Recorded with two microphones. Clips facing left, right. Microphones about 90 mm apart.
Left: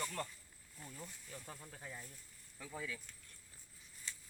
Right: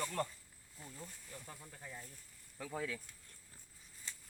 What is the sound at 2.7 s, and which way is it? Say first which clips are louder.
Speech: right 4 dB; 65° right (ahead or behind).